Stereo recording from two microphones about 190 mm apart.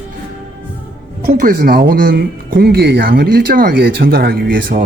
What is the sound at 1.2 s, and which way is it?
Speech, 45° right (ahead or behind).